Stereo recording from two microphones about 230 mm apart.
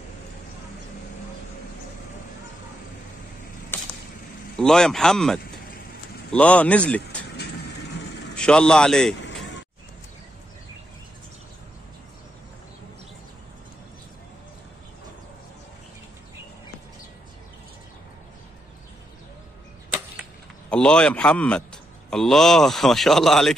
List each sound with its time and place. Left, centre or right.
3.7 s a sound: centre
4.6 s speech: centre
7.3 s vehicle: left
8.4 s speech: centre
9.2 s a sound: left
20.7 s speech: centre